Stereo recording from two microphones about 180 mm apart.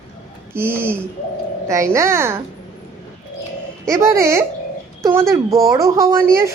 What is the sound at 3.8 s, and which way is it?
Speech, 15° right (ahead or behind).